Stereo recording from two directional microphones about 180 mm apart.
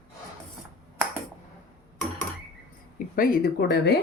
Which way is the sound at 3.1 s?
55° left (ahead or behind).